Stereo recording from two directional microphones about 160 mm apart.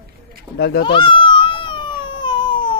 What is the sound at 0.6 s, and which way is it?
Speech, 90° left.